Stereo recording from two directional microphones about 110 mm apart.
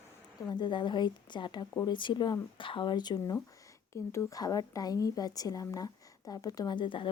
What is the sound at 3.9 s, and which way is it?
Speech, 25° left (ahead or behind).